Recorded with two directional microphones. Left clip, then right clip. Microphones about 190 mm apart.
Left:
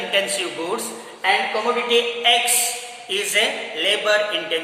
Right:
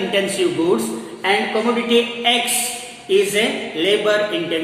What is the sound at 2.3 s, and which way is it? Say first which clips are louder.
Speech: even; 20° left (ahead or behind).